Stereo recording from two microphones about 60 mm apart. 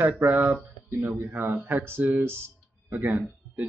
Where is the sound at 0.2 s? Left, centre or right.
Right.